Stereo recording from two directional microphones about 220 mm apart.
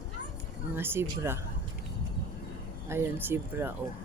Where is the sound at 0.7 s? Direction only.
10° right (ahead or behind).